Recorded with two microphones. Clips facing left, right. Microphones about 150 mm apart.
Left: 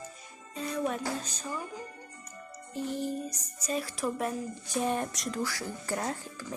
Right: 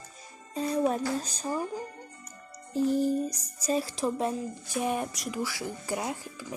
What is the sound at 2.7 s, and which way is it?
Speech, 40° right (ahead or behind).